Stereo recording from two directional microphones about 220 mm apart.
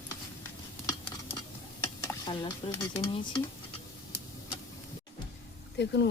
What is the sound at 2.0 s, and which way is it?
Speech, 20° left (ahead or behind).